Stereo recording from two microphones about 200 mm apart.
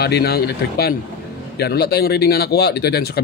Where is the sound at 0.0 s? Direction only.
55° left (ahead or behind).